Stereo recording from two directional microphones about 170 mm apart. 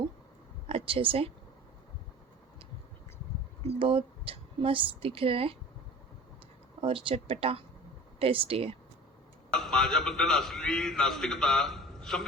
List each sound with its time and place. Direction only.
0.7 s speech: 35° right (ahead or behind)
3.8 s speech: 30° right (ahead or behind)
6.8 s speech: 35° right (ahead or behind)
9.5 s a man's voice: 5° left (ahead or behind)